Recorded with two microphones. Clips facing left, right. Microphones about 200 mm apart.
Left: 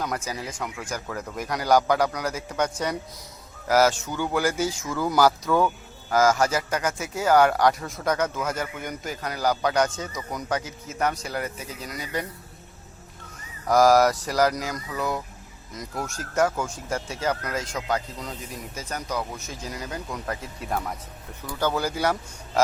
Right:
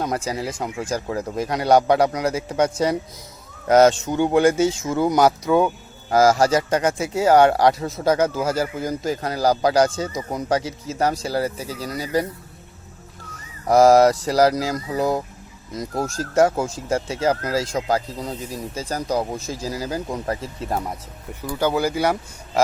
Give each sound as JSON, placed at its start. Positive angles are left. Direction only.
{"t": 0.0, "sound": "speech", "side_deg": -30}
{"t": 13.7, "sound": "speech", "side_deg": -25}
{"t": 21.6, "sound": "speech", "side_deg": -10}